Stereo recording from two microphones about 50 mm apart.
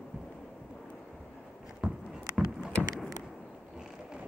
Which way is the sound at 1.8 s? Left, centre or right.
Centre.